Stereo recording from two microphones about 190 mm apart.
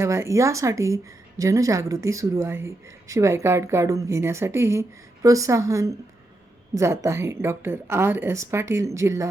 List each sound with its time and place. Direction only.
0.0 s a woman's voice: 15° right (ahead or behind)